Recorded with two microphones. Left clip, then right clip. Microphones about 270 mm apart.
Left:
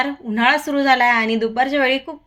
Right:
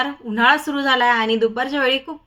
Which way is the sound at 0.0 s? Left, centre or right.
Centre.